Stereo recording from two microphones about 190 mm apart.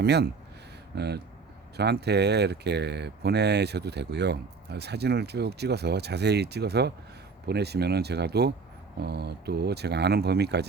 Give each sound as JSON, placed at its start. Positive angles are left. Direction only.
{"t": 0.0, "sound": "speech", "side_deg": -60}